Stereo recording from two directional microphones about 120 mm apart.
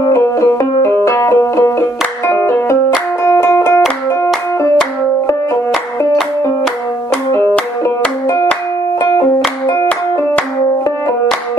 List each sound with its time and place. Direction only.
0.1 s banjo: 25° left (ahead or behind)
3.3 s music: 20° left (ahead or behind)